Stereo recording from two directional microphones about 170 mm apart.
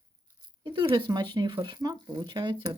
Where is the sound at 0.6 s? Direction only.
25° right (ahead or behind).